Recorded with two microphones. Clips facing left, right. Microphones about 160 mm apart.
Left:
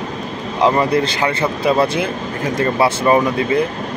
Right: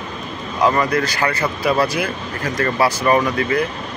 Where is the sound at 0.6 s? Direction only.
30° left (ahead or behind).